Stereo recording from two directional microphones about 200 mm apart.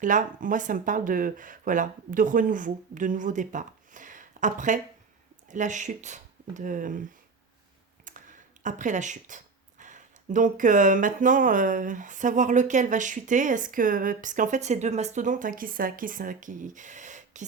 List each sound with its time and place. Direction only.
0.0 s speech: 40° right (ahead or behind)
8.0 s speech: 40° right (ahead or behind)